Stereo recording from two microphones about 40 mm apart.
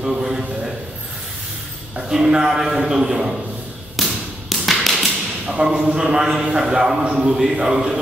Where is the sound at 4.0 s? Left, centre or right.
Centre.